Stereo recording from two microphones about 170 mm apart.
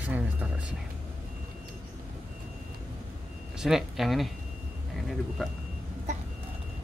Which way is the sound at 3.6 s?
Centre (ahead or behind).